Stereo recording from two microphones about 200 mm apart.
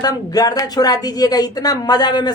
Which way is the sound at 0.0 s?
20° left (ahead or behind).